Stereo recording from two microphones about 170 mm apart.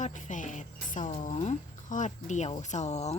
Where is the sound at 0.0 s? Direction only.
45° left (ahead or behind).